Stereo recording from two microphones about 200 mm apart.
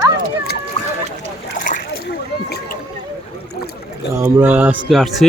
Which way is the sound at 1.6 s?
45° left (ahead or behind).